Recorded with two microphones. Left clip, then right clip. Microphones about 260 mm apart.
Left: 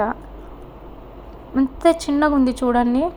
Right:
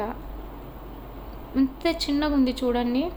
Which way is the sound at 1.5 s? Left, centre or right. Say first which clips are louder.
Left 8 dB; centre.